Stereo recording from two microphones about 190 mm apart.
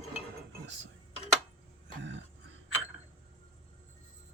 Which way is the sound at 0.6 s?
70° right (ahead or behind).